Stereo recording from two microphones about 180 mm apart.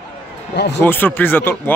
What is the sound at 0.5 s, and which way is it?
Speech, 70° left (ahead or behind).